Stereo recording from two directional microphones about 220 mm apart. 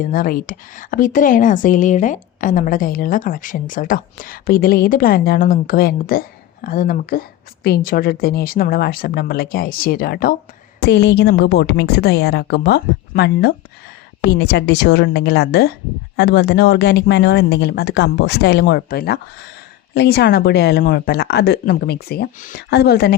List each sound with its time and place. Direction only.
0.0 s a woman's voice: 40° left (ahead or behind)